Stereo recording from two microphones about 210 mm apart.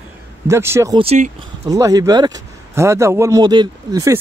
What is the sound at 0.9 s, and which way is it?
Speech, 30° right (ahead or behind).